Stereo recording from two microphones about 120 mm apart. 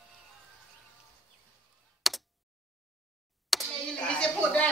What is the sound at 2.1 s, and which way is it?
Computer keyboard, centre (ahead or behind).